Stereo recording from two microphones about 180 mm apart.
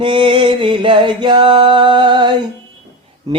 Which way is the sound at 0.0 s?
30° right (ahead or behind).